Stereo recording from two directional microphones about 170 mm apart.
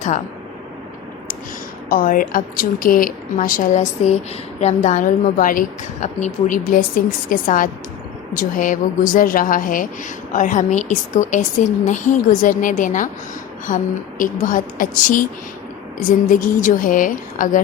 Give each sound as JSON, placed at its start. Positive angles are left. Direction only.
{"t": 1.9, "sound": "a woman's voice", "side_deg": 55}